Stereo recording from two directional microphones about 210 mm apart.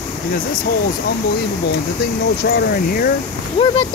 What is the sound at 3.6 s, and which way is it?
Speech, 30° left (ahead or behind).